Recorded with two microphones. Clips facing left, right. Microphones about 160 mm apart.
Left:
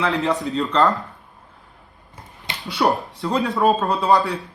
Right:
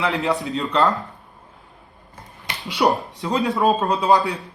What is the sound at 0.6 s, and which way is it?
Speech, 20° right (ahead or behind).